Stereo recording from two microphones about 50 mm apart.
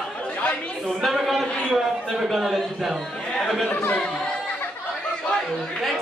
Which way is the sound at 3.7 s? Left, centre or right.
Left.